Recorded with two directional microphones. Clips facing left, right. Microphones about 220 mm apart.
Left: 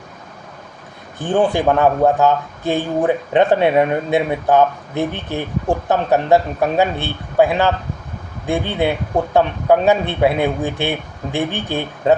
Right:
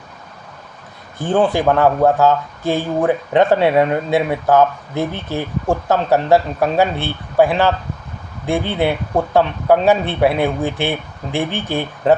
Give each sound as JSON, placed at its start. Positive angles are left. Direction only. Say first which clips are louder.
{"t": 1.2, "sound": "speech", "louder": "right 1 dB", "side_deg": 15}